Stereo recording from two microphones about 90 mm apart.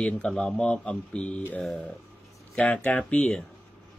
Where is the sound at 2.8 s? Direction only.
10° left (ahead or behind).